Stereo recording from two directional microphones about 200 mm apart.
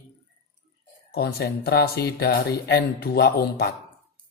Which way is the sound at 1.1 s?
50° left (ahead or behind).